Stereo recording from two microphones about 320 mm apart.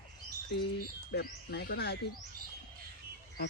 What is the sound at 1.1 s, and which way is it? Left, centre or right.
Speech, left.